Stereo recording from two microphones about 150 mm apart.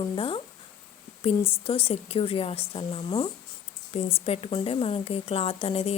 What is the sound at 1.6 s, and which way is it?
A woman's voice, 40° left (ahead or behind).